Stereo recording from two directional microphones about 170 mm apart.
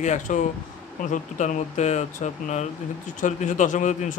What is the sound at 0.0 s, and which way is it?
Speech, 45° left (ahead or behind).